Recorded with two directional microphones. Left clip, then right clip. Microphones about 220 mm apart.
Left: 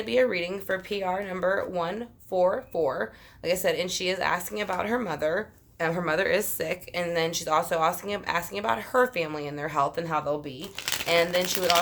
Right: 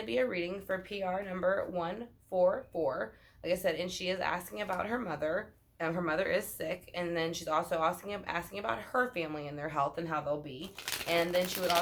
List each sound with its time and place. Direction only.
0.0 s speech: 40° left (ahead or behind)